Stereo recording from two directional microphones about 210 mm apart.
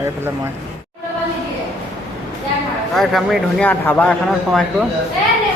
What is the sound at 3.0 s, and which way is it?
A man's voice, centre (ahead or behind).